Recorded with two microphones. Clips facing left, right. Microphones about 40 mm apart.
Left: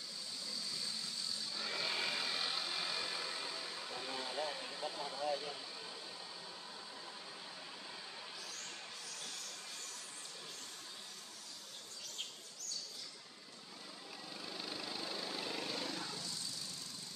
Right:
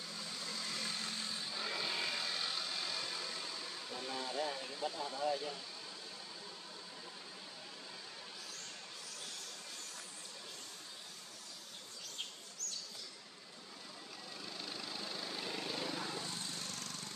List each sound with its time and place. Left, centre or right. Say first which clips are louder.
0.4 s a sound: right 3 dB; right
1.7 s vehicle: left 1 dB; centre
14.4 s vehicle: left 1 dB; centre
16.2 s vehicle: right 3 dB; right